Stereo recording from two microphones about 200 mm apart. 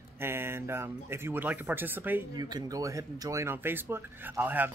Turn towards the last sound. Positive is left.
turn(degrees=-10)  # may be behind; listen again after turning